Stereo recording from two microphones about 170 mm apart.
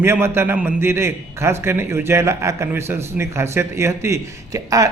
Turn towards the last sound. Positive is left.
turn(degrees=-20)  # may be behind; listen again after turning